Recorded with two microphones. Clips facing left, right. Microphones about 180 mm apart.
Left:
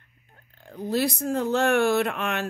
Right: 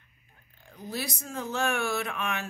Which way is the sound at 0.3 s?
60° left (ahead or behind).